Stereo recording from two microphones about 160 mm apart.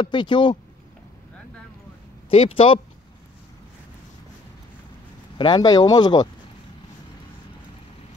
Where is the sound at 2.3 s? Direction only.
35° left (ahead or behind).